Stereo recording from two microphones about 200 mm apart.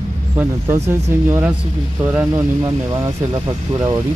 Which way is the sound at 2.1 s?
15° right (ahead or behind).